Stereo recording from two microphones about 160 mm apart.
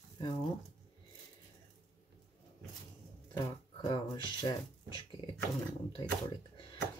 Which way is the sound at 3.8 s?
25° left (ahead or behind).